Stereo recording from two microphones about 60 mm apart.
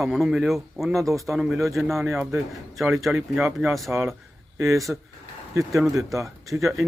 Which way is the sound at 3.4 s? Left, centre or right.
Centre.